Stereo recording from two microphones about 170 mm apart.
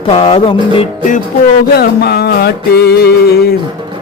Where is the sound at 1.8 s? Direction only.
70° left (ahead or behind).